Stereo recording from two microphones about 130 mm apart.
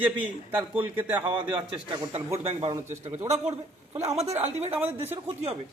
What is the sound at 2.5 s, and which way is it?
A man's voice, 45° right (ahead or behind).